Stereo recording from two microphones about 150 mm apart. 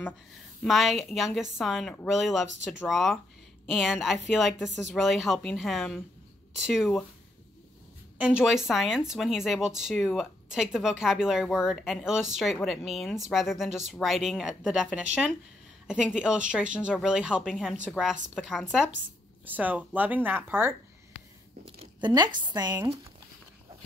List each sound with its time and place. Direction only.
0.7 s speech: centre (ahead or behind)
8.2 s speech: 5° right (ahead or behind)
19.4 s speech: 10° right (ahead or behind)
22.0 s speech: 30° right (ahead or behind)